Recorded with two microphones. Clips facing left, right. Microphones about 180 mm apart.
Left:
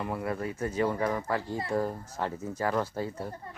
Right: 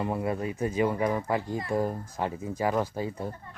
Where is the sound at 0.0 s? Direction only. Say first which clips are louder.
Right 3 dB; 20° right (ahead or behind).